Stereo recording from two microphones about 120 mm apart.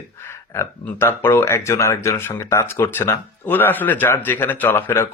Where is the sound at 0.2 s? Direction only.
20° left (ahead or behind).